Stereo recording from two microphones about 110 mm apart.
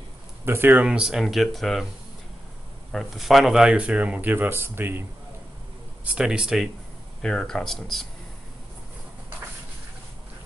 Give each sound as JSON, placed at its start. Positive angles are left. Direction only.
{"t": 0.5, "sound": "speech", "side_deg": -20}
{"t": 2.9, "sound": "speech", "side_deg": 0}
{"t": 6.1, "sound": "speech", "side_deg": -10}
{"t": 7.2, "sound": "speech", "side_deg": 5}